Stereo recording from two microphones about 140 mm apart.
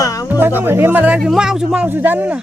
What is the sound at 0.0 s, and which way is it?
Music, 25° left (ahead or behind).